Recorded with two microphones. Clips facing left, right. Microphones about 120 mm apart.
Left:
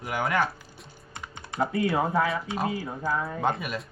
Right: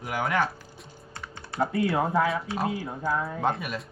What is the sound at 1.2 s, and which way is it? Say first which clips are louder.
Typing: even; 20° left (ahead or behind).